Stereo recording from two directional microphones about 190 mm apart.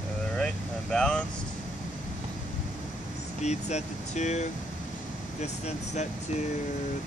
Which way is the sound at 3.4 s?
35° left (ahead or behind).